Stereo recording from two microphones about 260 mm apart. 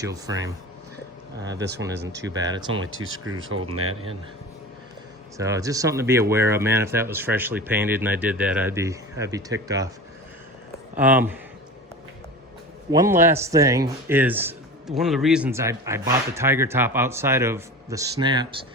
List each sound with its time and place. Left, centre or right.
0.0 s speech: centre
1.4 s speech: right
2.5 s speech: centre
2.8 s speech: right
5.4 s speech: centre
10.9 s speech: centre
12.9 s speech: centre